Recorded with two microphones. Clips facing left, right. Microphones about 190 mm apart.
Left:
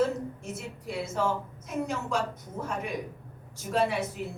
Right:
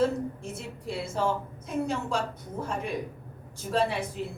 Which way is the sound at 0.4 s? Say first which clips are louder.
Right 1 dB; 30° right (ahead or behind).